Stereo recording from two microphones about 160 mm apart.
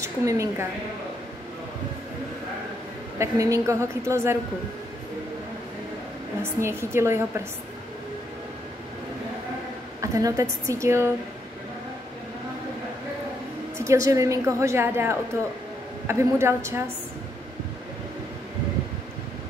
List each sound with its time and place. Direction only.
0.0 s a woman's voice: 20° right (ahead or behind)
3.2 s a woman's voice: 20° right (ahead or behind)
6.4 s a woman's voice: 15° right (ahead or behind)
10.0 s a woman's voice: 20° right (ahead or behind)
13.7 s a woman's voice: 20° right (ahead or behind)